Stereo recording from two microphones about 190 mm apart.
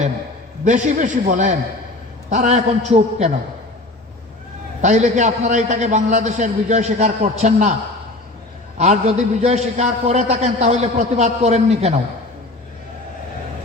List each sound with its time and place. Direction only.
0.9 s a man's voice: 40° right (ahead or behind)
4.8 s a man's voice: 40° right (ahead or behind)
8.8 s a man's voice: 35° right (ahead or behind)